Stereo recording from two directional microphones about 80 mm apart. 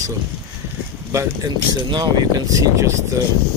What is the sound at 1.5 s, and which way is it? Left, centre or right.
Speech, right.